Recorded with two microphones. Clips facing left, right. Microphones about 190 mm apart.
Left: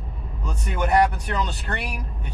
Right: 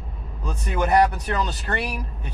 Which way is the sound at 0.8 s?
Centre (ahead or behind).